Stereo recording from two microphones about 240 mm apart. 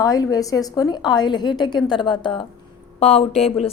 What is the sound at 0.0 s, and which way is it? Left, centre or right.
A woman's voice, centre.